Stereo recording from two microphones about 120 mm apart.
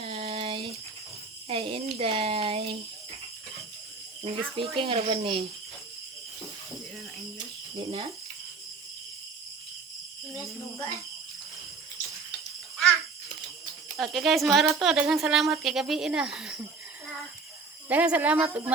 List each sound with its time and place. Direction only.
0.0 s a sound: 50° right (ahead or behind)
4.2 s speech: 45° right (ahead or behind)
7.9 s speech: 55° right (ahead or behind)
13.9 s speech: centre (ahead or behind)
17.8 s speech: 15° right (ahead or behind)